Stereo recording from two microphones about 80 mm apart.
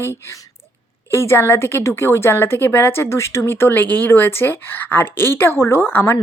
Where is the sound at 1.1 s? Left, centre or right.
Left.